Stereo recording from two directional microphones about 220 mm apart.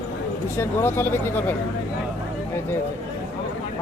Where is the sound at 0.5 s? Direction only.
10° left (ahead or behind).